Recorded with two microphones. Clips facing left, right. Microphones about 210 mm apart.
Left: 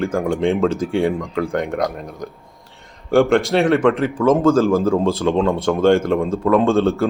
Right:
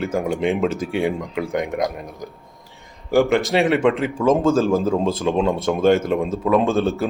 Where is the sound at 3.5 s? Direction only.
15° right (ahead or behind).